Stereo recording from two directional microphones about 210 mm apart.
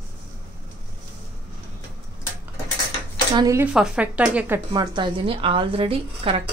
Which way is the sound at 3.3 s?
15° right (ahead or behind).